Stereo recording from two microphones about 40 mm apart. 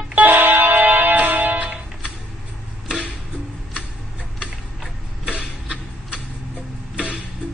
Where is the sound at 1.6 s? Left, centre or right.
Right.